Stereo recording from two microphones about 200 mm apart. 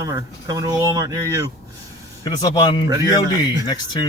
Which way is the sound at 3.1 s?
20° left (ahead or behind).